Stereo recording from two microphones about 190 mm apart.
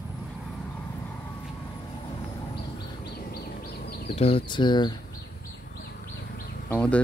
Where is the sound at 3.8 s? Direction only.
55° left (ahead or behind).